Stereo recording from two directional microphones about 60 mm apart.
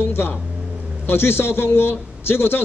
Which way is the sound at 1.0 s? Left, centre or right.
Left.